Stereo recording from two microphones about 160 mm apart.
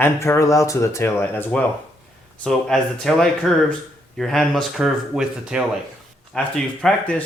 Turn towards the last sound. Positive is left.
turn(degrees=5)  # may be behind; listen again after turning